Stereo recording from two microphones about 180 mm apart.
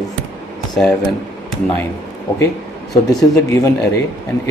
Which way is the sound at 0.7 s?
Centre (ahead or behind).